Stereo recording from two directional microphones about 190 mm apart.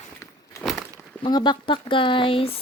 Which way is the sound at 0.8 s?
20° left (ahead or behind).